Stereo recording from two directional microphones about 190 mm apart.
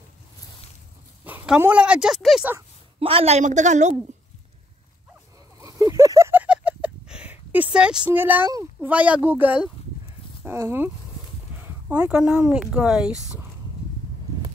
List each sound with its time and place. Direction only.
1.2 s speech: 5° right (ahead or behind)
3.0 s a woman's voice: 30° right (ahead or behind)
5.6 s a sound: 15° right (ahead or behind)
10.4 s speech: 10° right (ahead or behind)